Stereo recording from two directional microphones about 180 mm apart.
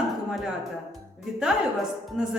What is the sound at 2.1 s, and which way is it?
Speech, 5° right (ahead or behind).